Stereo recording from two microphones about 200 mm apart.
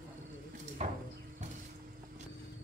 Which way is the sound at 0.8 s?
35° right (ahead or behind).